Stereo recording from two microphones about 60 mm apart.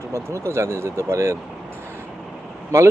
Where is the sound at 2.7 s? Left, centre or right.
Right.